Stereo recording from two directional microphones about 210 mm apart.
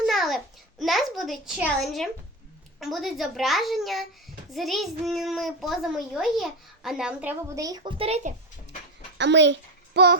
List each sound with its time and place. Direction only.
0.0 s a child's voice: centre (ahead or behind); by 8.3 s 30° right (ahead or behind)
9.1 s a child's voice: 55° right (ahead or behind)